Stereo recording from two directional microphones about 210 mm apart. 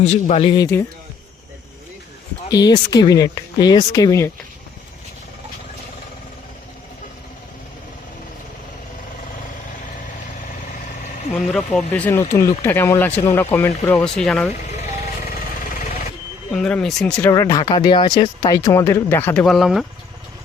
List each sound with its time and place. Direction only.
0.0 s speech: 30° left (ahead or behind)
2.5 s speech: 20° left (ahead or behind)
11.5 s speech: 5° left (ahead or behind)
16.5 s speech: 5° left (ahead or behind)